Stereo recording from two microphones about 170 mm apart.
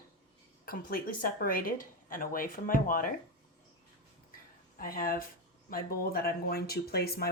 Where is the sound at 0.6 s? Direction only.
60° left (ahead or behind).